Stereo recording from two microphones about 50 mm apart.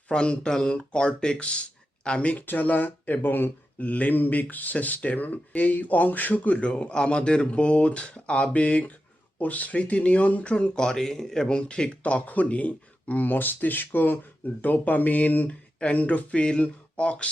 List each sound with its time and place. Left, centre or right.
0.1 s speech: centre
2.4 s speech: left
3.8 s speech: left
10.8 s speech: centre; by 15.4 s left
15.4 s speech: left